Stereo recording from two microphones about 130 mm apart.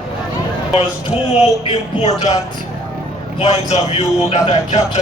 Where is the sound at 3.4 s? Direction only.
55° left (ahead or behind).